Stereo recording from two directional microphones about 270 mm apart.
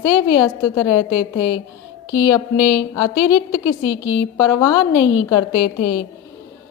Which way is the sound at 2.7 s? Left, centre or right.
Centre.